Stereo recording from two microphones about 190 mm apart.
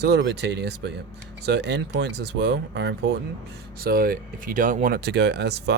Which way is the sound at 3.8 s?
50° right (ahead or behind).